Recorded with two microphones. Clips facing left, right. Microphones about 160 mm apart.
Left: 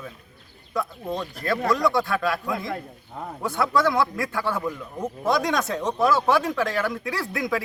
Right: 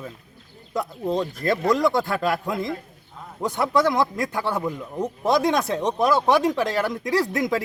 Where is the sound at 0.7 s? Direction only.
25° right (ahead or behind).